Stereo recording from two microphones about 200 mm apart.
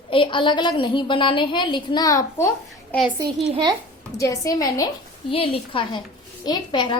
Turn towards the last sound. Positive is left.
turn(degrees=20)  # may be behind; listen again after turning